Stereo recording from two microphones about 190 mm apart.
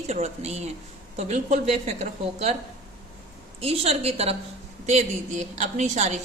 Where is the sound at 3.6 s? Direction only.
30° right (ahead or behind).